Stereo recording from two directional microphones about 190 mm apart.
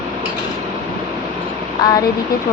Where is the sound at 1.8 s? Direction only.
20° left (ahead or behind).